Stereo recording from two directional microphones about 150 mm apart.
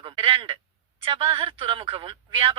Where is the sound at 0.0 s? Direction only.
35° right (ahead or behind).